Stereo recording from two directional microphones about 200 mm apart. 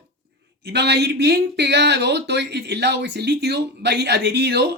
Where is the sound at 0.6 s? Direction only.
55° right (ahead or behind).